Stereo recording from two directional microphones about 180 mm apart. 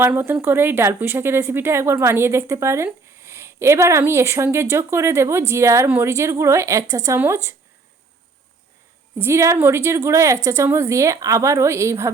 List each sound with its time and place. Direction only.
0.0 s a woman's voice: 15° right (ahead or behind)
9.1 s a woman's voice: 15° right (ahead or behind)